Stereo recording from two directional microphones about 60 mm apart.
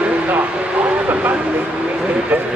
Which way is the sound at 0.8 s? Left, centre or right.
Right.